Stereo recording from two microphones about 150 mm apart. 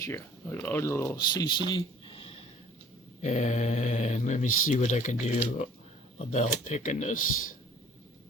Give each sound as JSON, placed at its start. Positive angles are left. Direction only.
{"t": 0.0, "sound": "speech", "side_deg": 15}
{"t": 1.2, "sound": "speech", "side_deg": 30}
{"t": 3.2, "sound": "speech", "side_deg": 50}